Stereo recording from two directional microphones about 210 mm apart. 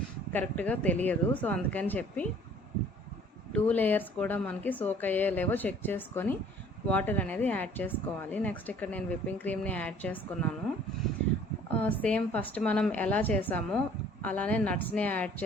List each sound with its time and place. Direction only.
0.3 s speech: 5° left (ahead or behind)
3.5 s speech: 10° left (ahead or behind)
11.8 s speech: 5° left (ahead or behind)